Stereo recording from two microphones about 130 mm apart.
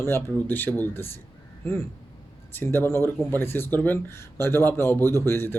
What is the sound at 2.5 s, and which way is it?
A man's voice, 15° left (ahead or behind).